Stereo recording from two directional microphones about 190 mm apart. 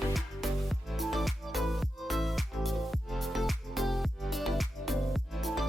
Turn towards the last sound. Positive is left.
turn(degrees=0)  # may be behind; listen again after turning